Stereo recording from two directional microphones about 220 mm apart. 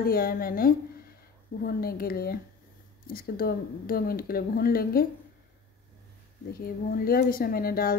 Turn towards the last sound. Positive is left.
turn(degrees=40)  # may be behind; listen again after turning